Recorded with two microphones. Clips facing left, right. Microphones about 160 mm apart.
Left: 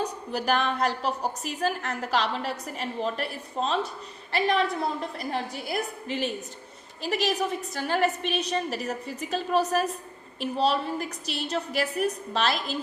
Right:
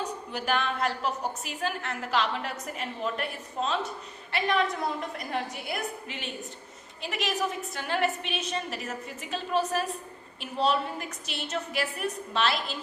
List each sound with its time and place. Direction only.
0.0 s a woman's voice: 40° left (ahead or behind)